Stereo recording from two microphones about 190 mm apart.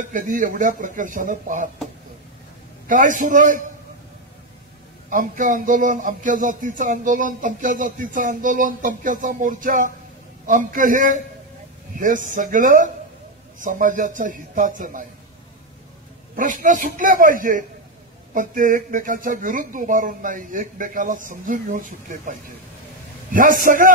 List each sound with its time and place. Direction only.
0.0 s speech: 45° right (ahead or behind)
2.9 s speech: 45° right (ahead or behind)
5.1 s speech: 45° right (ahead or behind)
16.3 s speech: 45° right (ahead or behind)